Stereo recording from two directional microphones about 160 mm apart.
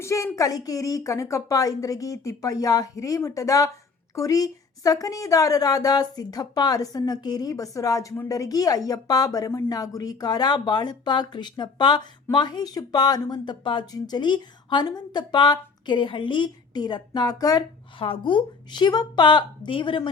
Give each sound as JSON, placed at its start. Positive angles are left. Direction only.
{"t": 0.0, "sound": "a woman's voice", "side_deg": 20}